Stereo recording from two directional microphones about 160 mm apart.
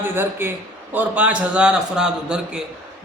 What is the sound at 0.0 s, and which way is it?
A man's voice, 15° right (ahead or behind).